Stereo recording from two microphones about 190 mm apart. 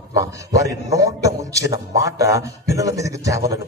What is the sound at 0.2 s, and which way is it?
A man's voice, 15° right (ahead or behind).